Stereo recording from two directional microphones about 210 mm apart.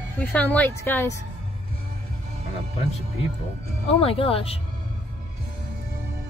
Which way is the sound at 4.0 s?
25° left (ahead or behind).